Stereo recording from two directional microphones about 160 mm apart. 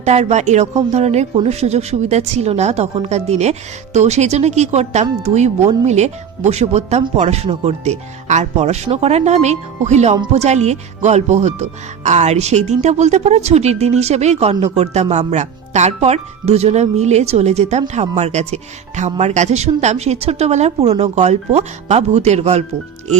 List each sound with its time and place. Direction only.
0.0 s speech: 45° right (ahead or behind)